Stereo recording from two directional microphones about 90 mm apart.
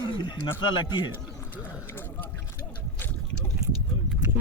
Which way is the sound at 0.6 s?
65° left (ahead or behind).